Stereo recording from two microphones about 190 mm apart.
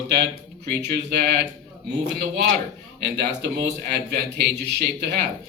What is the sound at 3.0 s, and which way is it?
A man's voice, 60° right (ahead or behind).